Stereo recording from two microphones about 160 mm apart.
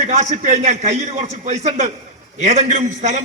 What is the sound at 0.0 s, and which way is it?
A man's voice, 45° right (ahead or behind).